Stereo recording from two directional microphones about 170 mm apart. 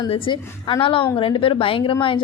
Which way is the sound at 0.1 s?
30° left (ahead or behind).